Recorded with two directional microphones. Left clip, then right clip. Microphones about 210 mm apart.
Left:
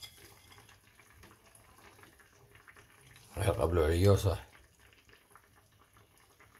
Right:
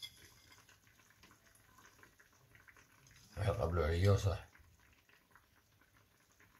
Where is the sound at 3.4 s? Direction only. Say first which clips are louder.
Left 7 dB; 50° left (ahead or behind).